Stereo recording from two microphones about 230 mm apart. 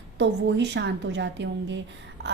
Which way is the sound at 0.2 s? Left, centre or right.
Right.